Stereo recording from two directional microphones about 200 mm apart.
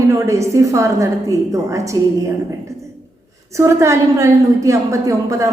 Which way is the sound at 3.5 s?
15° right (ahead or behind).